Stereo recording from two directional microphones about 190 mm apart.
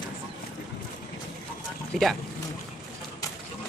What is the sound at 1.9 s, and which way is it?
Speech, centre (ahead or behind).